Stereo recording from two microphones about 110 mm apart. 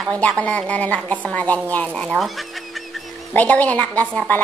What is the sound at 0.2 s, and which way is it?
A woman's voice, 10° left (ahead or behind).